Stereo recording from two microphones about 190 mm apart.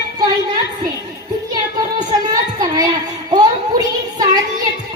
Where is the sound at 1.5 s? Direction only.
20° right (ahead or behind).